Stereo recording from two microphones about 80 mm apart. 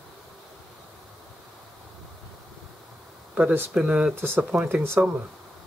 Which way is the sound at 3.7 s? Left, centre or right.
Centre.